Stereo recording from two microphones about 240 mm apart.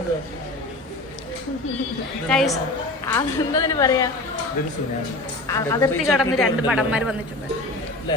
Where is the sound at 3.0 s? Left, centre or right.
Centre.